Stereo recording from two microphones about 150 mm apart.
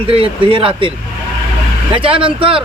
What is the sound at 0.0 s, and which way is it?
Speech, 40° right (ahead or behind).